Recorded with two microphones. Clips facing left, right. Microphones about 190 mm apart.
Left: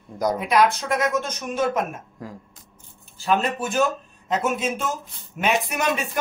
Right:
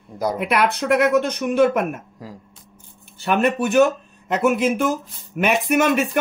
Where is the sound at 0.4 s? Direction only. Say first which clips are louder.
Left 1 dB; 65° right (ahead or behind).